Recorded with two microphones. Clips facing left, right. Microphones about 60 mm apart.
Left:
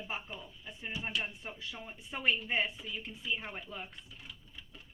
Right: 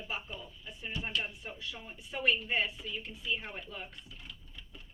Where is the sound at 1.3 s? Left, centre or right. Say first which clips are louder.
Right 1 dB; left.